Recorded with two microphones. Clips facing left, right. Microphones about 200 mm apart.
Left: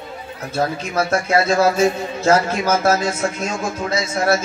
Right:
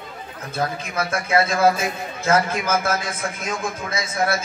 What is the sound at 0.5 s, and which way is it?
A man's voice, 30° left (ahead or behind).